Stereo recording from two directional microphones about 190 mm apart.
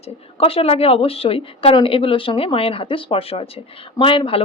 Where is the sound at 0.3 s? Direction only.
30° left (ahead or behind).